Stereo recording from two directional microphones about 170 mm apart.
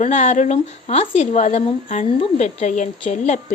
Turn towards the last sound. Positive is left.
turn(degrees=40)  # may be behind; listen again after turning